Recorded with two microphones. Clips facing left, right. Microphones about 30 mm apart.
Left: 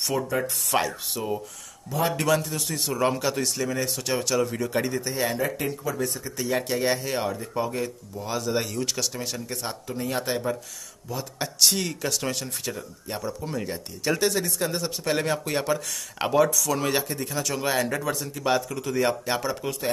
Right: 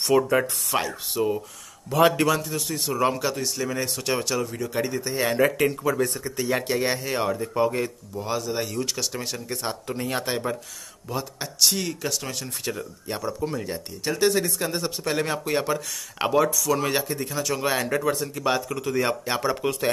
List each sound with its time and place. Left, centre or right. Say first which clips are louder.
0.1 s speech: right 8 dB; right
0.7 s speech: left 1 dB; centre
1.9 s speech: right 7 dB; right
2.1 s speech: right 1 dB; centre
4.5 s speech: left 1 dB; centre
6.0 s speech: right 2 dB; right
6.3 s speech: right 1 dB; centre
11.1 s speech: even; centre
13.4 s speech: right 2 dB; centre
14.6 s speech: right 1 dB; centre
19.5 s speech: right 4 dB; right